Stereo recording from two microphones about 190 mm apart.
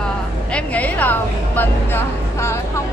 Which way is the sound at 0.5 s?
5° left (ahead or behind).